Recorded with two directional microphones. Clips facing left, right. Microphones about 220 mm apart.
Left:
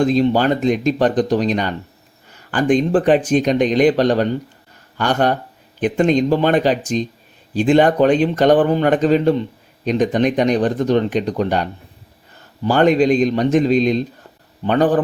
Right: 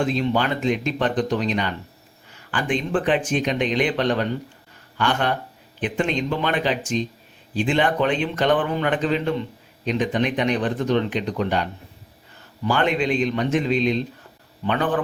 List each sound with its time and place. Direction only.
0.0 s speech: 40° left (ahead or behind)